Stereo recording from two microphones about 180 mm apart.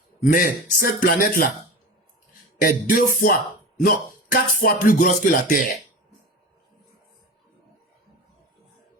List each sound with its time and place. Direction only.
0.2 s music: 50° left (ahead or behind)
2.6 s music: 50° left (ahead or behind)